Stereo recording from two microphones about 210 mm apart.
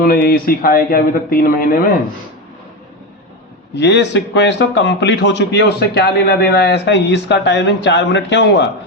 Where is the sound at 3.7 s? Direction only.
55° left (ahead or behind).